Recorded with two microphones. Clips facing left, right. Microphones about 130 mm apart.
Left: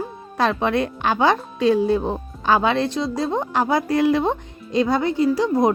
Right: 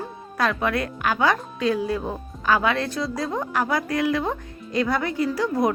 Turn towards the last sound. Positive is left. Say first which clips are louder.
# left 4 dB
turn(degrees=20)  # may be behind; listen again after turning